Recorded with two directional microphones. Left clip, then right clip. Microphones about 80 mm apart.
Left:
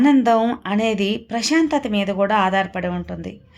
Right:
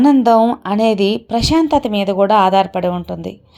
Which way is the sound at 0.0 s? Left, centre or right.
Right.